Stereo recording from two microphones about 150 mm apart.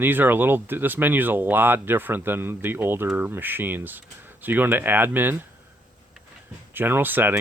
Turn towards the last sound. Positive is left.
turn(degrees=-15)  # may be behind; listen again after turning